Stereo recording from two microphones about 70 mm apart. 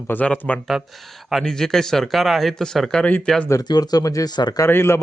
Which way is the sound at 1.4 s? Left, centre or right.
Centre.